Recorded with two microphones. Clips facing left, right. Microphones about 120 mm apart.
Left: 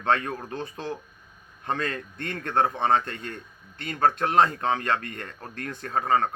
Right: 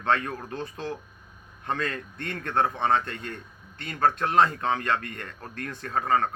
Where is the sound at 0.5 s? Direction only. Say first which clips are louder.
Left 1 dB; 40° left (ahead or behind).